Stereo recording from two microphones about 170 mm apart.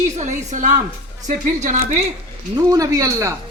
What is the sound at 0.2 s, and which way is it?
Speech, 45° right (ahead or behind).